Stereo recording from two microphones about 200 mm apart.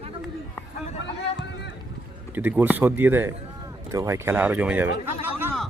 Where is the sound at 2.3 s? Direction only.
10° right (ahead or behind).